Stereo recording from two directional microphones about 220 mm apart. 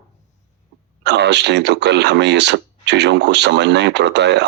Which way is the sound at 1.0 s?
50° right (ahead or behind).